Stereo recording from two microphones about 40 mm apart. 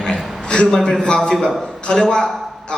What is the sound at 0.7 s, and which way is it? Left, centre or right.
A man's voice, centre.